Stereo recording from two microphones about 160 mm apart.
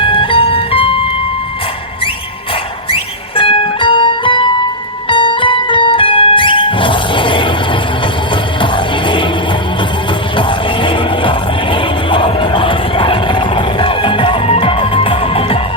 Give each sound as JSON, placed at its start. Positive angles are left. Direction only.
{"t": 0.0, "sound": "music", "side_deg": 35}
{"t": 2.9, "sound": "music", "side_deg": 35}
{"t": 10.3, "sound": "music", "side_deg": 30}